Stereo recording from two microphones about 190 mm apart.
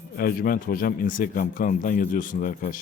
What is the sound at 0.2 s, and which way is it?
Speech, 50° left (ahead or behind).